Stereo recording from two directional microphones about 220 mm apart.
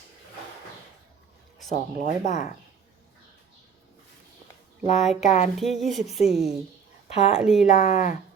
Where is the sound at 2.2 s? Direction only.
30° left (ahead or behind).